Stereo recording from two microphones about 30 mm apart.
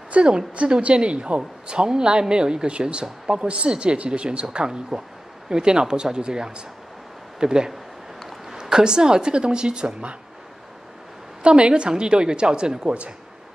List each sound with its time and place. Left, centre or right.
0.2 s speech: right
4.6 s a woman's voice: right
11.4 s speech: right